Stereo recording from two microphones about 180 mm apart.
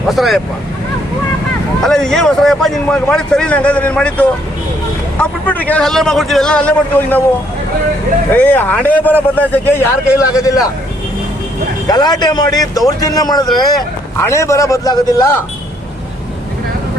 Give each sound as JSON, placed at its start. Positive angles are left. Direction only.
{"t": 0.1, "sound": "speech", "side_deg": 0}
{"t": 1.8, "sound": "speech", "side_deg": 5}
{"t": 8.3, "sound": "a man's voice", "side_deg": 10}
{"t": 11.9, "sound": "a man's voice", "side_deg": 20}